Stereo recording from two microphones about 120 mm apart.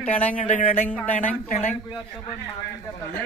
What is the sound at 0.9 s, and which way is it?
Speech, 15° left (ahead or behind).